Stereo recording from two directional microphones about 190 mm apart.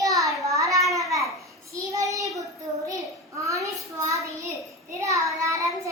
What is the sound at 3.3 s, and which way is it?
A child's voice, 15° right (ahead or behind).